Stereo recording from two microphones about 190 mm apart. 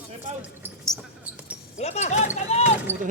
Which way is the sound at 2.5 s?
35° left (ahead or behind).